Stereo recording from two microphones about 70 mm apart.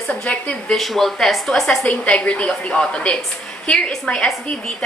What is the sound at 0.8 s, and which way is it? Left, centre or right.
Speech, centre.